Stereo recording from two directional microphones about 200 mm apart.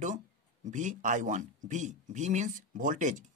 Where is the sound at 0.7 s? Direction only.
40° right (ahead or behind).